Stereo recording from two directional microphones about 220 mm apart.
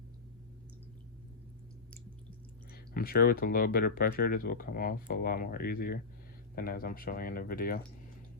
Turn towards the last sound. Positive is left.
turn(degrees=40)  # may be behind; listen again after turning